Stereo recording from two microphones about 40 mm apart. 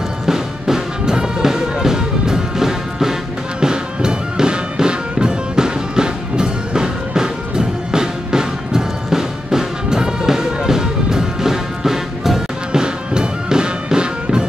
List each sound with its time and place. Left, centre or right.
0.3 s music: centre